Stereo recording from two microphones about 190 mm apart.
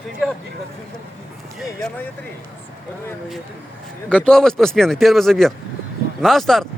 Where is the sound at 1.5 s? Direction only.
5° left (ahead or behind).